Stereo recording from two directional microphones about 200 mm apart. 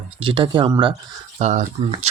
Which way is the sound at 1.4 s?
35° right (ahead or behind).